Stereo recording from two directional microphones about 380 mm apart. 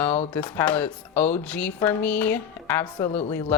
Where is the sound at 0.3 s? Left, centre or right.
Centre.